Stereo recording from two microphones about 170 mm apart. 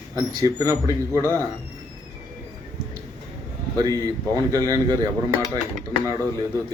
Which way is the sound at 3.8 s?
20° right (ahead or behind).